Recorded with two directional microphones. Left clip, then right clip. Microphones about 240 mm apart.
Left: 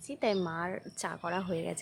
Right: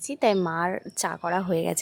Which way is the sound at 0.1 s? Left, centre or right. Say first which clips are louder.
Right 8 dB; right.